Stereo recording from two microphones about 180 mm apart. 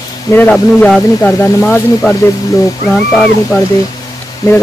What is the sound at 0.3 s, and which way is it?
Speech, 10° left (ahead or behind).